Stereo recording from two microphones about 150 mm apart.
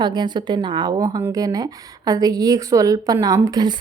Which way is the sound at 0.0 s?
30° right (ahead or behind).